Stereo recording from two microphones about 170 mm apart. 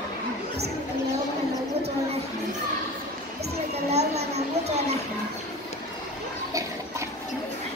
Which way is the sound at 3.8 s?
40° right (ahead or behind).